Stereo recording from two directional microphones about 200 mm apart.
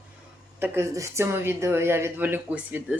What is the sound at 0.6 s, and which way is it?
A woman's voice, 10° right (ahead or behind).